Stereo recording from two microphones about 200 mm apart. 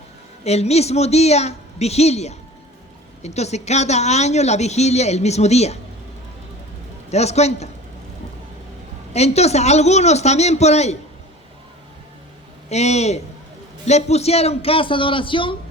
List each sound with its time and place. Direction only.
0.4 s a woman's voice: 30° left (ahead or behind)
7.1 s a woman's voice: 35° left (ahead or behind)
9.1 s a woman's voice: 30° left (ahead or behind)
12.6 s a woman's voice: 35° left (ahead or behind)